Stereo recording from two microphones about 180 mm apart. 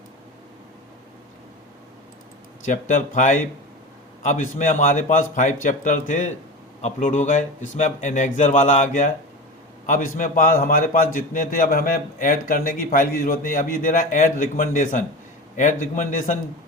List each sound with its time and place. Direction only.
2.6 s a man's voice: 45° left (ahead or behind)